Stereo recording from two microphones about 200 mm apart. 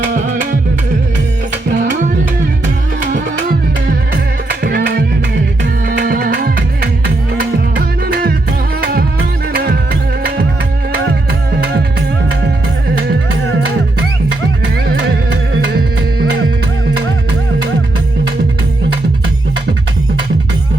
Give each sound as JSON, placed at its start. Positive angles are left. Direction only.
{"t": 4.6, "sound": "music", "side_deg": -50}